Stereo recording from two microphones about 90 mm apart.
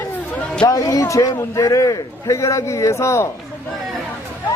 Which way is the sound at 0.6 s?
45° left (ahead or behind).